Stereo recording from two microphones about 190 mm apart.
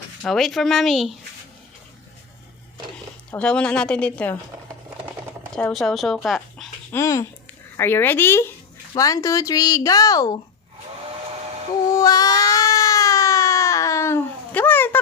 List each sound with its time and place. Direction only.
0.2 s speech: centre (ahead or behind)
3.3 s speech: 5° left (ahead or behind)
5.5 s speech: 5° left (ahead or behind)
6.2 s a sound: centre (ahead or behind)
6.9 s speech: 15° left (ahead or behind)
11.9 s baby cry: 20° left (ahead or behind)